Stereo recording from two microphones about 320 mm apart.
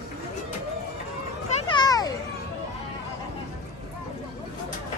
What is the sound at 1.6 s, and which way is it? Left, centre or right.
Children playing, centre.